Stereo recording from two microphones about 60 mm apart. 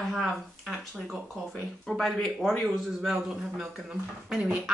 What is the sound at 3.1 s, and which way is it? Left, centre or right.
Speech, centre.